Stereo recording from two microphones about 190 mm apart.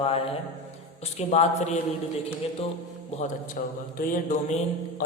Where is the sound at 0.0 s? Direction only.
30° left (ahead or behind).